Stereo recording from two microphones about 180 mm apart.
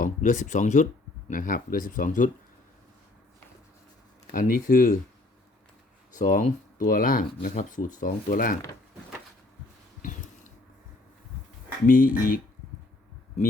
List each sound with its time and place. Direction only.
0.0 s speech: 45° left (ahead or behind)
4.3 s speech: 50° left (ahead or behind)
6.1 s speech: 45° left (ahead or behind)
11.9 s speech: 50° left (ahead or behind)